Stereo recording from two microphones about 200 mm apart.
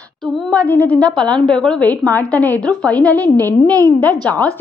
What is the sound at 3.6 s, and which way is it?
Speech, 15° right (ahead or behind).